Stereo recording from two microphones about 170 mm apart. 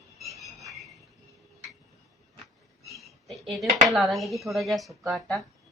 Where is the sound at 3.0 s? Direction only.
Centre (ahead or behind).